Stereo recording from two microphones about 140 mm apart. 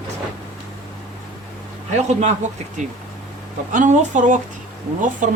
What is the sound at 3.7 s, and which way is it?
Speech, 65° right (ahead or behind).